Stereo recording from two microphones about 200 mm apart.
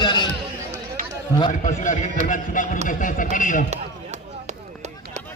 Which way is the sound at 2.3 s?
40° left (ahead or behind).